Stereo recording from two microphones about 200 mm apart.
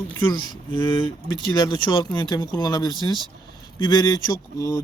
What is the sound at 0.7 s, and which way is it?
Speech, 25° left (ahead or behind).